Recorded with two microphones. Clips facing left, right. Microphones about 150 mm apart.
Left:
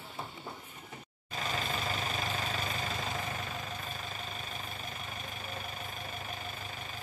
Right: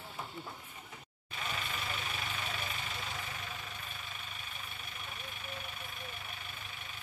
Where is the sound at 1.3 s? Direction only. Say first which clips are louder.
Left 5 dB; 40° left (ahead or behind).